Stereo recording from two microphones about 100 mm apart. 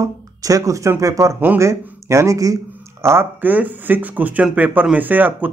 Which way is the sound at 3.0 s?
20° right (ahead or behind).